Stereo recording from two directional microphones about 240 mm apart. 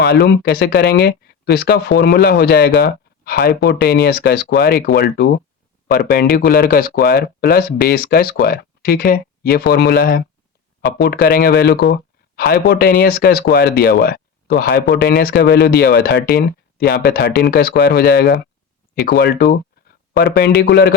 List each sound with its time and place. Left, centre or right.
0.0 s speech: left